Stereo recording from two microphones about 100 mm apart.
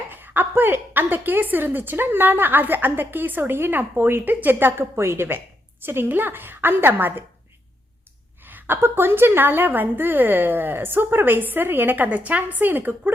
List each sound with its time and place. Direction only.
0.1 s a woman's voice: 20° right (ahead or behind)
8.4 s a woman's voice: 20° right (ahead or behind)